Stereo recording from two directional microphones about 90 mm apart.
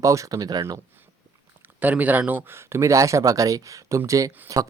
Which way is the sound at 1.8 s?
15° right (ahead or behind).